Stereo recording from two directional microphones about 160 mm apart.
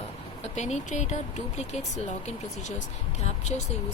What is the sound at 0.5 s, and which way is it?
Speech, 45° left (ahead or behind).